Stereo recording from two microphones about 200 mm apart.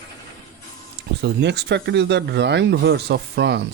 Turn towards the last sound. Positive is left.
turn(degrees=-60)  # may be behind; listen again after turning